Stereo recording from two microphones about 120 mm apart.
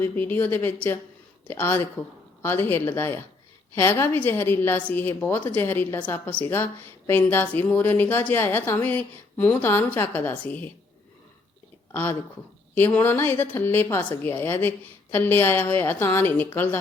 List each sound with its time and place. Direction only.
0.0 s a woman's voice: 15° left (ahead or behind)
11.9 s a woman's voice: 20° left (ahead or behind)